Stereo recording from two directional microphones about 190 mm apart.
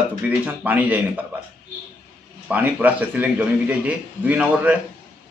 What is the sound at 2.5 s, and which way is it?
A man's voice, 5° right (ahead or behind).